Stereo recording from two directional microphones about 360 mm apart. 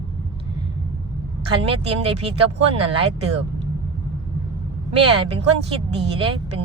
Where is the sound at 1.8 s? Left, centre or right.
Centre.